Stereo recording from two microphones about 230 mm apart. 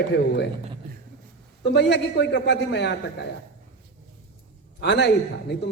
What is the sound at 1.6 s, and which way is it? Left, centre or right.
A man's voice, left.